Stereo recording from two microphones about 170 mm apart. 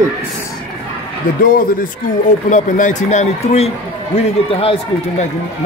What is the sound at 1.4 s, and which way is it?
Speech, 55° left (ahead or behind).